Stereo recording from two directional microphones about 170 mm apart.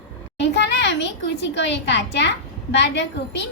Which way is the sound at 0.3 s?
85° left.